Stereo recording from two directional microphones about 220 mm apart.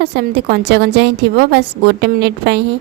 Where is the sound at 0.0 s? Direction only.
45° right (ahead or behind).